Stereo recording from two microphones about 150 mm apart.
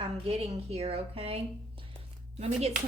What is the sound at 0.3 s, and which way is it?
Speech, 40° right (ahead or behind).